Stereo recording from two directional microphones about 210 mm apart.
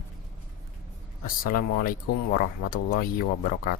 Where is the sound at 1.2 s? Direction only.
40° left (ahead or behind).